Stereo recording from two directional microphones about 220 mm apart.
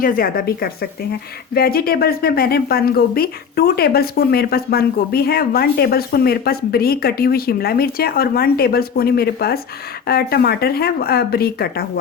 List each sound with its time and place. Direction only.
0.0 s speech: 40° left (ahead or behind)